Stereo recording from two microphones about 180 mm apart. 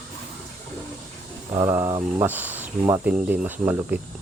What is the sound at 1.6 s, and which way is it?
Speech, 15° right (ahead or behind).